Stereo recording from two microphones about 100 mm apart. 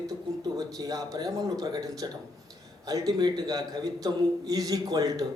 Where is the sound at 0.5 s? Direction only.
40° right (ahead or behind).